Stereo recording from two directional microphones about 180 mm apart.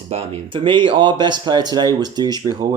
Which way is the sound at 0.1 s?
30° right (ahead or behind).